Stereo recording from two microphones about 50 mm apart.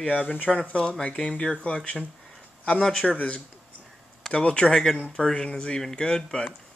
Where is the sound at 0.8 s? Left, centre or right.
Centre.